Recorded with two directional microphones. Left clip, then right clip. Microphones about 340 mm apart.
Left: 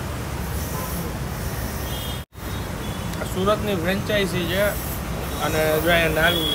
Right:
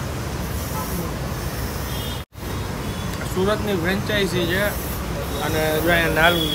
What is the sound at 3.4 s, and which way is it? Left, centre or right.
Speech, centre.